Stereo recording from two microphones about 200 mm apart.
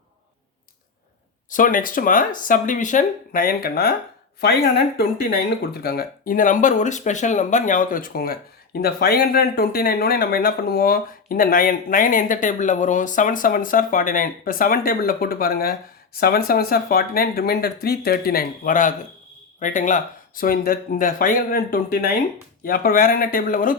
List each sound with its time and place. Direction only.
1.5 s speech: 40° left (ahead or behind)